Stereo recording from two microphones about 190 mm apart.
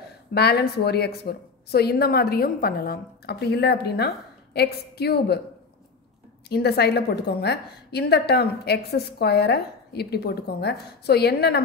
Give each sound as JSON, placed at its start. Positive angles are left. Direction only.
{"t": 0.3, "sound": "a woman's voice", "side_deg": 60}
{"t": 6.5, "sound": "a woman's voice", "side_deg": 55}